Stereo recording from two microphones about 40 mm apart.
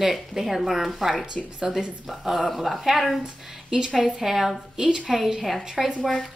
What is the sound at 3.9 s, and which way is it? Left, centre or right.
Speech, centre.